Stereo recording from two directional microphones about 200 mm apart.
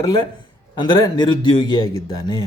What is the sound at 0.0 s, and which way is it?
Speech, 20° left (ahead or behind).